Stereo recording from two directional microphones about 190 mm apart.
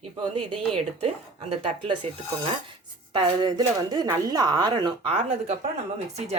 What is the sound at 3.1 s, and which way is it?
Speech, 25° right (ahead or behind).